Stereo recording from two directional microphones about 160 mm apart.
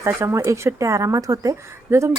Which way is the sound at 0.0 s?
15° right (ahead or behind).